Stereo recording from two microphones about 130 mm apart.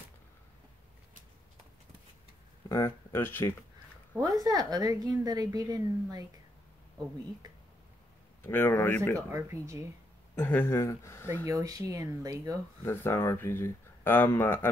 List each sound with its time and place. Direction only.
2.7 s speech: 20° left (ahead or behind)
4.2 s a woman's voice: 30° right (ahead or behind)
8.4 s speech: 15° left (ahead or behind)
9.3 s a woman's voice: 25° right (ahead or behind)
10.3 s speech: 15° left (ahead or behind)
11.4 s a woman's voice: 25° right (ahead or behind)
12.8 s speech: 15° left (ahead or behind)